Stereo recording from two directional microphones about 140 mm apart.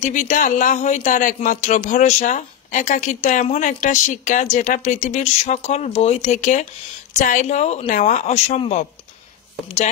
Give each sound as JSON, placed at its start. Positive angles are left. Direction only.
{"t": 0.0, "sound": "speech", "side_deg": 60}